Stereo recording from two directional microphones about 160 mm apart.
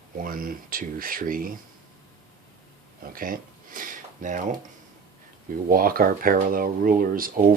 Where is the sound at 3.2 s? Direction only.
60° right (ahead or behind).